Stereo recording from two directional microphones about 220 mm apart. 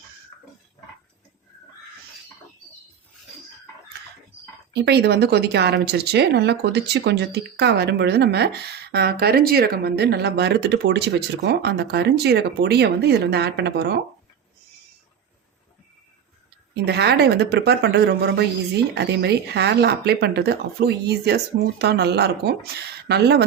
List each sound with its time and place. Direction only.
4.7 s a woman's voice: 50° right (ahead or behind)
16.8 s a woman's voice: 50° right (ahead or behind)